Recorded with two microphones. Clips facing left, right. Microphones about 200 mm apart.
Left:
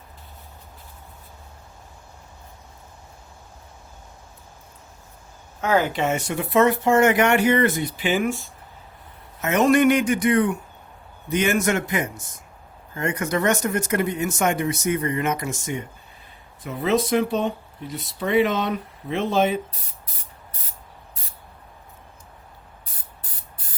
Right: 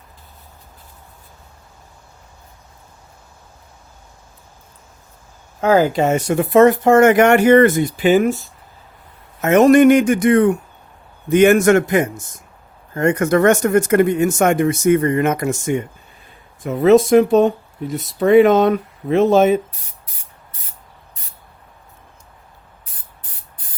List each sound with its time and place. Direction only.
5.5 s speech: 40° right (ahead or behind)
9.4 s speech: 50° right (ahead or behind)